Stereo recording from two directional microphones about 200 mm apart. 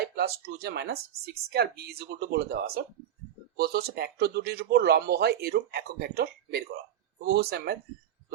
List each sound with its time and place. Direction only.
0.0 s speech: 55° right (ahead or behind)